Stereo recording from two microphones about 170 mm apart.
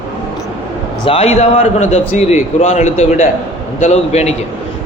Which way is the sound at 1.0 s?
35° left (ahead or behind).